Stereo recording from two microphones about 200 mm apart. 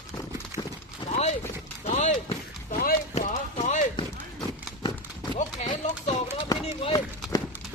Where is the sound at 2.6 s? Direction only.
40° left (ahead or behind).